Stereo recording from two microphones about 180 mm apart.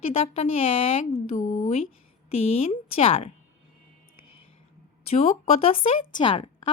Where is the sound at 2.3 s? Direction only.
35° left (ahead or behind).